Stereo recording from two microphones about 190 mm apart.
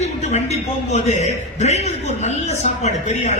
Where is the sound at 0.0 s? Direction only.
35° left (ahead or behind).